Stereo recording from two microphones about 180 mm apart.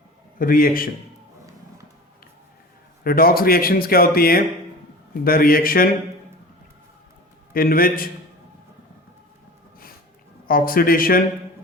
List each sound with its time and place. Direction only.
0.3 s speech: 50° left (ahead or behind)
3.0 s speech: 55° left (ahead or behind)
7.5 s speech: 55° left (ahead or behind)
10.4 s speech: 55° left (ahead or behind)